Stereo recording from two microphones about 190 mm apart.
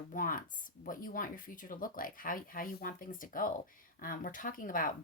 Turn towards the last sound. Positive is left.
turn(degrees=45)  # may be behind; listen again after turning